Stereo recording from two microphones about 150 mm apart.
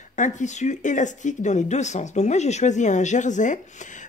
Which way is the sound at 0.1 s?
55° left (ahead or behind).